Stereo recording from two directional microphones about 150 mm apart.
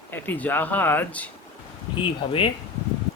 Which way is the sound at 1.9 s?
35° left (ahead or behind).